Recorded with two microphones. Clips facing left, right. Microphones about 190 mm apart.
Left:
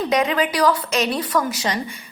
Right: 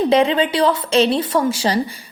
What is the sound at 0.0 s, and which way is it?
A woman's voice, 30° right (ahead or behind).